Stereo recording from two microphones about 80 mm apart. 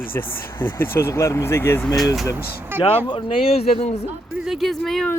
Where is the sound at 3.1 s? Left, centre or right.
Left.